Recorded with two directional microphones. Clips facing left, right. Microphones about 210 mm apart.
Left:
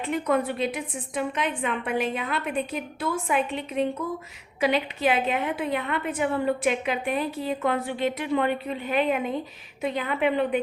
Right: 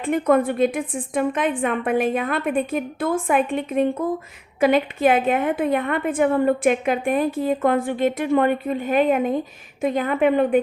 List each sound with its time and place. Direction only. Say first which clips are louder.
0.0 s a woman's voice: right 6 dB; 50° right (ahead or behind)